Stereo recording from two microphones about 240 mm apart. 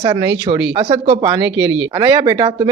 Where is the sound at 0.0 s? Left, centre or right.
Centre.